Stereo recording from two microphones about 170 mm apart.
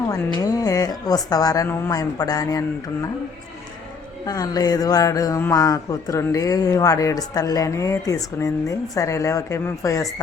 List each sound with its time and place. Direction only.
0.4 s speech: 20° left (ahead or behind)
4.3 s speech: 20° left (ahead or behind)